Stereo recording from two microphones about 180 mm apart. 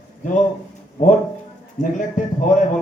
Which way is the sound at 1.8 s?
45° left (ahead or behind).